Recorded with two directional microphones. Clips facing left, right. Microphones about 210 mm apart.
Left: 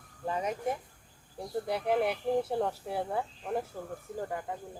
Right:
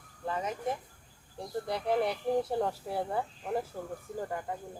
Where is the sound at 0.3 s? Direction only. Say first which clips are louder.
Left 2 dB; 15° left (ahead or behind).